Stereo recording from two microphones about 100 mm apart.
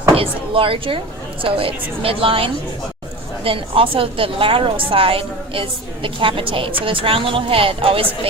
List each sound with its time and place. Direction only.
0.2 s a woman's voice: 65° right (ahead or behind)